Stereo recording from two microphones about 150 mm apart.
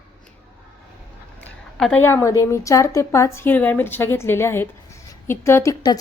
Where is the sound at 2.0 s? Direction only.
15° left (ahead or behind).